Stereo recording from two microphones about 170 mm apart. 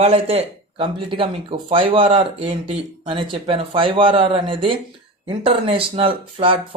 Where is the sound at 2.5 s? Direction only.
30° right (ahead or behind).